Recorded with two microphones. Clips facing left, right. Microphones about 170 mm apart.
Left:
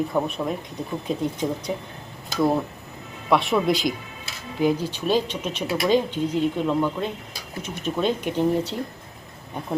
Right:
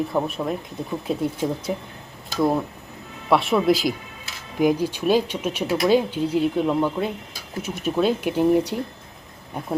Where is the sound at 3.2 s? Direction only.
Centre (ahead or behind).